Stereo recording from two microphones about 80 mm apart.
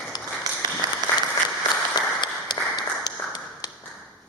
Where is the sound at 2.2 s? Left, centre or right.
Left.